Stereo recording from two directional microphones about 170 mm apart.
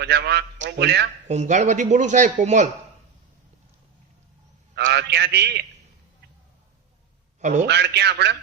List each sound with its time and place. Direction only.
0.0 s a man's voice: 80° right
1.3 s speech: 45° right (ahead or behind)
4.7 s a man's voice: 85° right
7.7 s a man's voice: 80° right